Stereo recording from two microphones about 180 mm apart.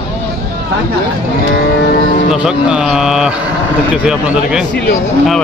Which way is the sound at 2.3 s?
5° right (ahead or behind).